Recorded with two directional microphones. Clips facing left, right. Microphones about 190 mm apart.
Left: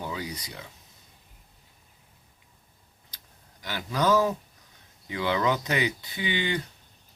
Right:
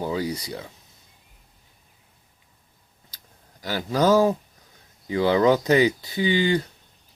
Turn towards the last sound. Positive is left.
turn(degrees=-35)  # may be behind; listen again after turning